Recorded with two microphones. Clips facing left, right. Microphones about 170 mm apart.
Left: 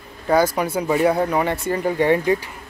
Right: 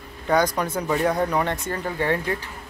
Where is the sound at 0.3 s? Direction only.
5° left (ahead or behind).